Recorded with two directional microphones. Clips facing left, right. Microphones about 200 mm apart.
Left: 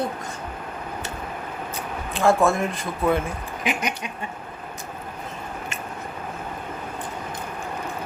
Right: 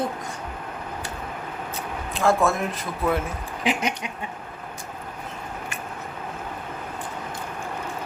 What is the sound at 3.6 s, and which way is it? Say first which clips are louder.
Speech: right 2 dB; 30° right (ahead or behind).